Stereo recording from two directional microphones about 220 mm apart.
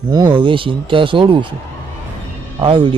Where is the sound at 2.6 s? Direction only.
20° right (ahead or behind).